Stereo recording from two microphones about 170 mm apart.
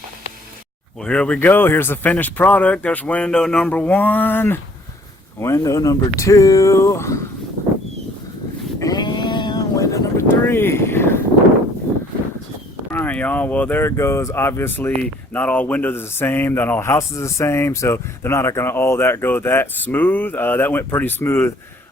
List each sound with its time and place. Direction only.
1.0 s speech: 5° left (ahead or behind)
8.8 s a sound: 25° left (ahead or behind)
12.9 s speech: 10° left (ahead or behind)